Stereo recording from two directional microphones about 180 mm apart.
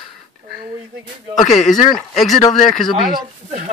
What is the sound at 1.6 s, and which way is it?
Speech, 45° left (ahead or behind).